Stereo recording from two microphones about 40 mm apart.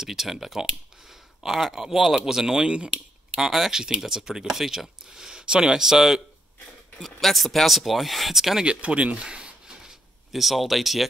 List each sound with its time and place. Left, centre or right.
0.0 s speech: centre
7.0 s speech: centre
8.6 s a sound: right
10.3 s speech: centre